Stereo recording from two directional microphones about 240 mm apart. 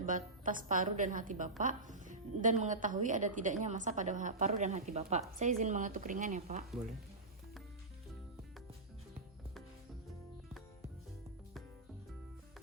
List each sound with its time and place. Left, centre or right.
0.0 s a woman's voice: right